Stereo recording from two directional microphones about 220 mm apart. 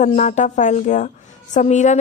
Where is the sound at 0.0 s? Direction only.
35° left (ahead or behind).